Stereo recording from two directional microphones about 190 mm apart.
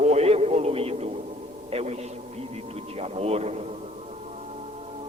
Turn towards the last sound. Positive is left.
turn(degrees=-35)  # may be behind; listen again after turning